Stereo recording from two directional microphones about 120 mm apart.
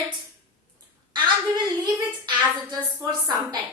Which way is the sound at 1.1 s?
40° right (ahead or behind).